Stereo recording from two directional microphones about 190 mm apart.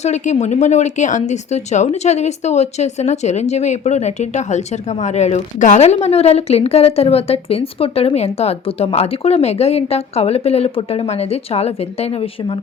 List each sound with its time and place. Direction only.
0.0 s speech: 35° left (ahead or behind)